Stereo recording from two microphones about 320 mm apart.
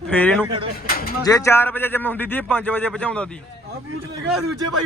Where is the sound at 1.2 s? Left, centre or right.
Centre.